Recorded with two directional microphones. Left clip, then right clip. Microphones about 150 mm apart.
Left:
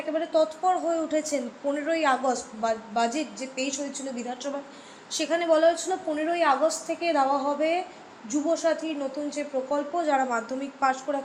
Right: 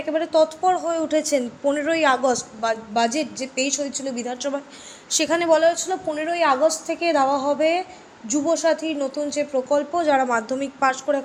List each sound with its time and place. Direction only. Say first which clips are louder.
0.1 s speech: right 5 dB; 90° right